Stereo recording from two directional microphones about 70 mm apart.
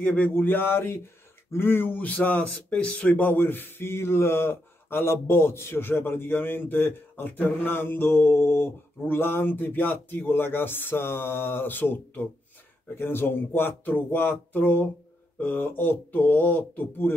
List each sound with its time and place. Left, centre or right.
0.0 s a sound: centre
0.3 s speech: left
3.1 s speech: left